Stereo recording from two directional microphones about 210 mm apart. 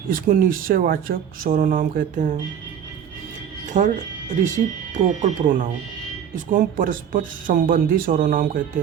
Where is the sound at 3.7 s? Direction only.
35° right (ahead or behind).